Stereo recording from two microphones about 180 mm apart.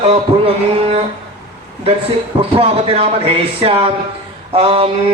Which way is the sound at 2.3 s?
30° right (ahead or behind).